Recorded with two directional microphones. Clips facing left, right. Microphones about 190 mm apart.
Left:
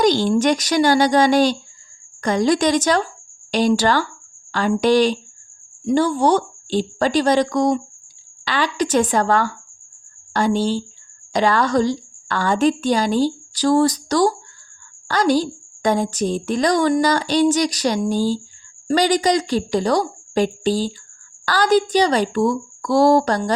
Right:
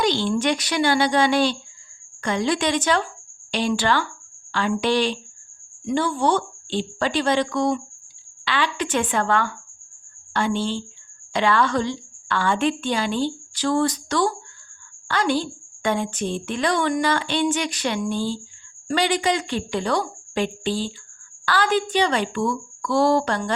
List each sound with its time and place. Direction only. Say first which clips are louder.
0.0 s a woman's voice: left 5 dB; 40° left (ahead or behind)